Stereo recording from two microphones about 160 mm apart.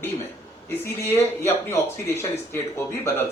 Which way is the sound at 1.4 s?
15° left (ahead or behind).